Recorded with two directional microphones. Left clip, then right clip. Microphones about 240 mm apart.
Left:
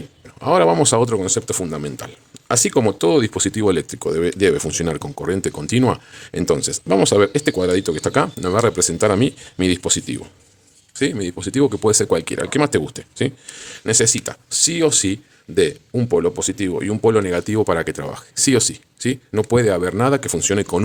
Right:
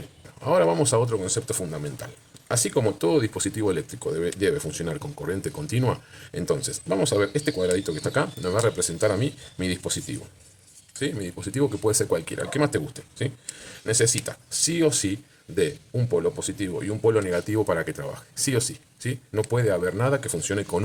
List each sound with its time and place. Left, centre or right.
0.3 s speech: left